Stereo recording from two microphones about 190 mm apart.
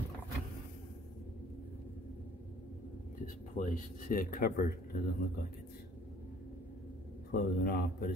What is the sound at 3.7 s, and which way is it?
Speech, 45° left (ahead or behind).